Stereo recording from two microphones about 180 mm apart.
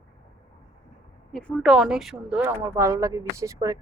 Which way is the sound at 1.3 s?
5° left (ahead or behind).